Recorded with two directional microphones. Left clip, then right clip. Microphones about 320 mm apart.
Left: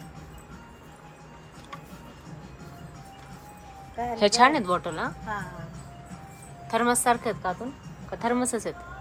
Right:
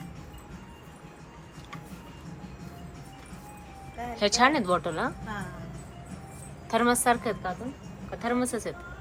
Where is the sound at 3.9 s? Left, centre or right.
Centre.